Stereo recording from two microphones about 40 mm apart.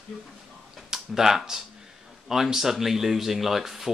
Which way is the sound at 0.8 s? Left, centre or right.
Centre.